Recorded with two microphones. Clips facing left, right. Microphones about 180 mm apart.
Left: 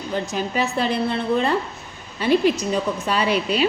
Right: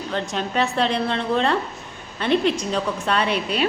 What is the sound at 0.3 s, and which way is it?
A woman's voice, 5° left (ahead or behind).